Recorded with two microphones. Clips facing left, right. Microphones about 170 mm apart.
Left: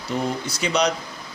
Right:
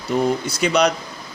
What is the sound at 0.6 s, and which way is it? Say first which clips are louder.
Speech: right 4 dB; 60° right (ahead or behind).